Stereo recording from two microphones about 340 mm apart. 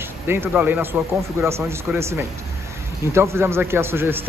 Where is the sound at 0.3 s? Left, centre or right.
Centre.